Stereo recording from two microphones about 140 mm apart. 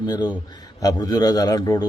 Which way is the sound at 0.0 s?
30° left (ahead or behind).